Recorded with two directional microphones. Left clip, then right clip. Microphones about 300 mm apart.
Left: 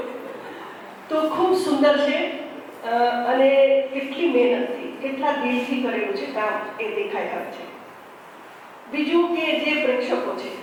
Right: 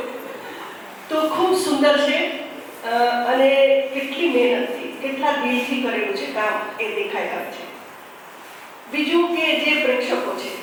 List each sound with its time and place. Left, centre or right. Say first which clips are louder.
1.3 s a woman's voice: right 1 dB; centre
8.9 s a woman's voice: right 1 dB; centre